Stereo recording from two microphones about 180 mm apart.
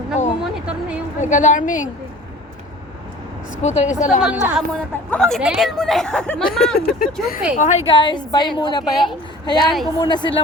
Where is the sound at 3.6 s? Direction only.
40° left (ahead or behind).